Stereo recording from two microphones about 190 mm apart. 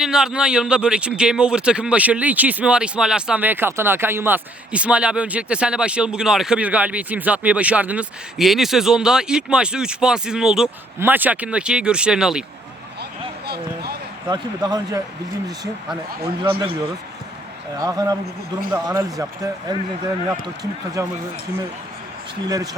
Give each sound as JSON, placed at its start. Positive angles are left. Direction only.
{"t": 0.0, "sound": "a man's voice", "side_deg": -5}
{"t": 14.3, "sound": "speech", "side_deg": -20}
{"t": 16.2, "sound": "speech", "side_deg": -20}
{"t": 17.7, "sound": "speech", "side_deg": -20}
{"t": 22.4, "sound": "speech", "side_deg": -20}